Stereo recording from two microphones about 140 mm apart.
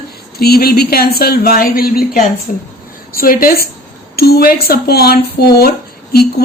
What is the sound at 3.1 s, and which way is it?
A woman's voice, 90° left.